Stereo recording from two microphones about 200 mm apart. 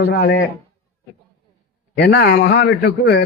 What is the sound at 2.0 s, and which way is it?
A man's voice, 50° left (ahead or behind).